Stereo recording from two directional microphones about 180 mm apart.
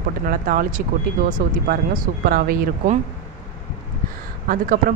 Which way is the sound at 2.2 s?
55° right (ahead or behind).